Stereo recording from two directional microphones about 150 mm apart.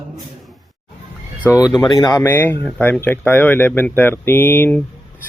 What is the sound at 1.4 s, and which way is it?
Speech, 10° right (ahead or behind).